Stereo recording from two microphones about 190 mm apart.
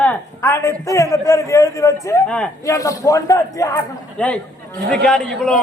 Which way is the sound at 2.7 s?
15° left (ahead or behind).